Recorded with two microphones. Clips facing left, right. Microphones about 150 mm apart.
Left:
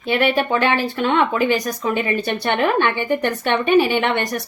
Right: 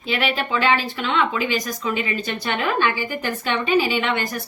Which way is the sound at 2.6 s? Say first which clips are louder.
Left 2 dB; 60° left (ahead or behind).